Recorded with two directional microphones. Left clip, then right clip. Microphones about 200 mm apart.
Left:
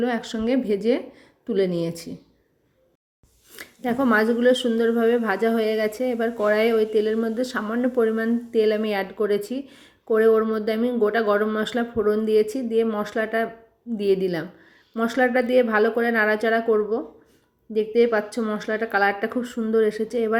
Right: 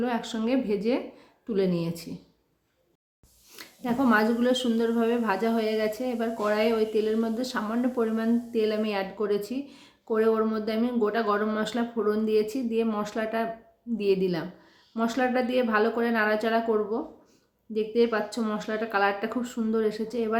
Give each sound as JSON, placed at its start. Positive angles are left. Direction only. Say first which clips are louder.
{"t": 0.0, "sound": "a woman's voice", "louder": "left 4 dB", "side_deg": 20}
{"t": 3.5, "sound": "a woman's voice", "louder": "left 4 dB", "side_deg": 15}